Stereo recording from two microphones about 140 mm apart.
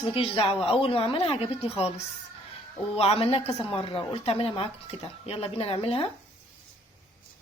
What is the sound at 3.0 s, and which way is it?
A woman's voice, 45° left (ahead or behind).